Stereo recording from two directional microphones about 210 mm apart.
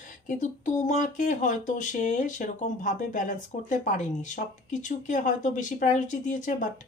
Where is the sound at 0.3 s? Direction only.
35° left (ahead or behind).